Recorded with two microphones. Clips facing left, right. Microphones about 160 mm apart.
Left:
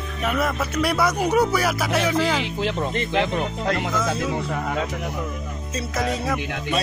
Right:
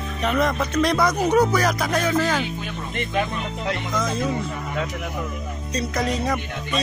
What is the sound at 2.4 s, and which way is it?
Speech, 85° left.